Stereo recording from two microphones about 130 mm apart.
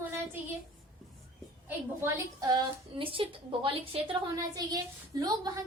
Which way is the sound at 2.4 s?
25° right (ahead or behind).